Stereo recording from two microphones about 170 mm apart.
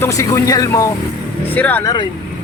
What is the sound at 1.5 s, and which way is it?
Speech, 10° left (ahead or behind).